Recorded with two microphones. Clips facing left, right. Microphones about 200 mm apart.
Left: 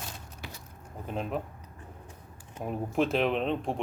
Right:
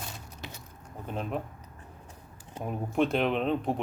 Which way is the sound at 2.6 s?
Centre (ahead or behind).